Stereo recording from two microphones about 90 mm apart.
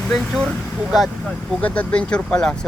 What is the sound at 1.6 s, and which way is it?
Speech, 15° left (ahead or behind).